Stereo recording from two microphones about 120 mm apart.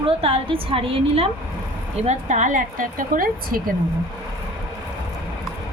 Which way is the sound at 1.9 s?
80° right.